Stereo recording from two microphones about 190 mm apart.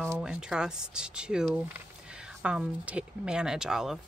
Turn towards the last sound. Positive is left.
turn(degrees=-5)  # may be behind; listen again after turning